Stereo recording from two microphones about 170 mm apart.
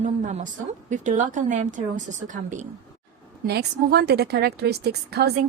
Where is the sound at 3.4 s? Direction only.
70° right (ahead or behind).